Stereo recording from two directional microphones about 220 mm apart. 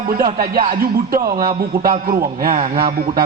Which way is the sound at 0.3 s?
40° right (ahead or behind).